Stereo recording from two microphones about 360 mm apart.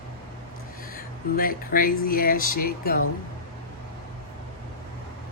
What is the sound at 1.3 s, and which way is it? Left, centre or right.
Speech, left.